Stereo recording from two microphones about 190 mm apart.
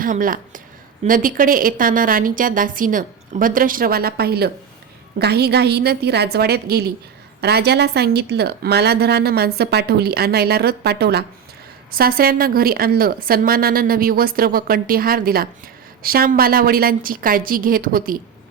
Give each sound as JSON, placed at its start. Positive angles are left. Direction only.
{"t": 0.0, "sound": "a woman's voice", "side_deg": -45}